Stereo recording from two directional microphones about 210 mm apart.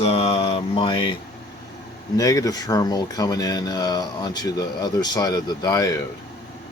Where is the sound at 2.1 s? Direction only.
15° left (ahead or behind).